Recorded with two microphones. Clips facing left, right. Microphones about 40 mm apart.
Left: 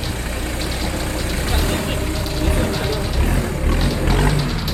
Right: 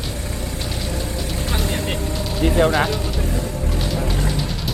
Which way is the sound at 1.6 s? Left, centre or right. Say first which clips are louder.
Left 3 dB; left.